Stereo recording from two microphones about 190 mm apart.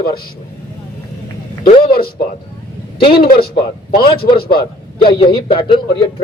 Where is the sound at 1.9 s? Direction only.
55° left (ahead or behind).